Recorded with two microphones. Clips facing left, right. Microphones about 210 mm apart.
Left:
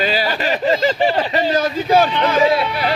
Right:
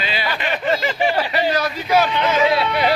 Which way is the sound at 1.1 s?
25° left (ahead or behind).